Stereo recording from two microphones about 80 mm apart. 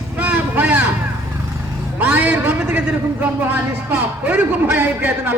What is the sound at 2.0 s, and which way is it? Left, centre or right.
A man's voice, right.